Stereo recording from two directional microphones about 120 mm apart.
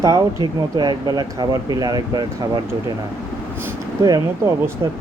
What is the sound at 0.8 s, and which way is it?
Speech, 35° right (ahead or behind).